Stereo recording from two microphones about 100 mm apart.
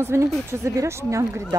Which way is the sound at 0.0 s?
25° right (ahead or behind).